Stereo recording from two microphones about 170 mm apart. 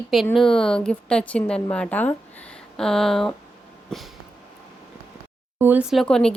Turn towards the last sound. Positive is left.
turn(degrees=5)  # may be behind; listen again after turning